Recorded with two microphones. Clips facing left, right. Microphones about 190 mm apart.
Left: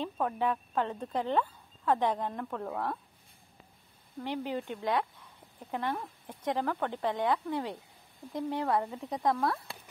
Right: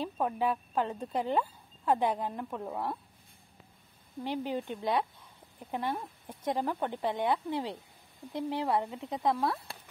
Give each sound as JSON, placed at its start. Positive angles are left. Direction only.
{"t": 0.0, "sound": "speech", "side_deg": -10}
{"t": 4.2, "sound": "speech", "side_deg": -20}
{"t": 9.1, "sound": "speech", "side_deg": -5}